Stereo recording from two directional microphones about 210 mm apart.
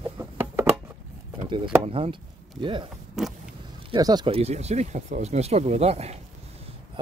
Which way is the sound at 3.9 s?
20° right (ahead or behind).